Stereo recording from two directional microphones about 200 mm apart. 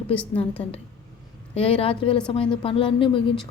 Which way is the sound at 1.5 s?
30° left (ahead or behind).